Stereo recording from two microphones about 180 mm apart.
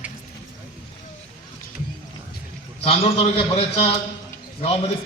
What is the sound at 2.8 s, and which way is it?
A man's voice, 35° left (ahead or behind).